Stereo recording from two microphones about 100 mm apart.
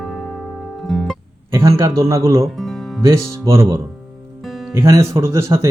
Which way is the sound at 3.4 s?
30° right (ahead or behind).